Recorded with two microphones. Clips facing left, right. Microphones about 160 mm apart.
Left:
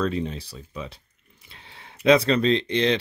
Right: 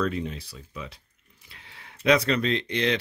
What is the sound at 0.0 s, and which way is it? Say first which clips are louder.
Speech: left 2 dB; 30° left (ahead or behind).